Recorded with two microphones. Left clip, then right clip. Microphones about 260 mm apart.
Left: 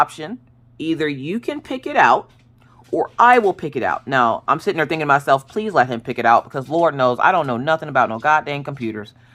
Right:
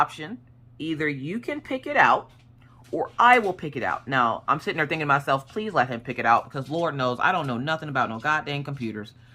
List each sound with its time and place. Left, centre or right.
0.0 s speech: left